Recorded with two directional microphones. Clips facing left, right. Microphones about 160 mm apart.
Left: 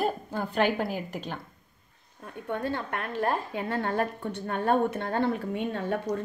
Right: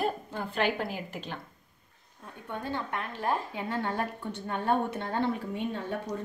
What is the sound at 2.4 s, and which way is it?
A woman's voice, 60° left (ahead or behind).